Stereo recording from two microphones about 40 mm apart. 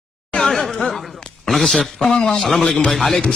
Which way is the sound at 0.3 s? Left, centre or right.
Centre.